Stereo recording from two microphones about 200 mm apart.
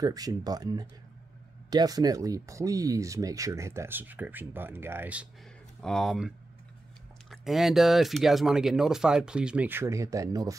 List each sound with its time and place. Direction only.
0.0 s speech: 20° right (ahead or behind)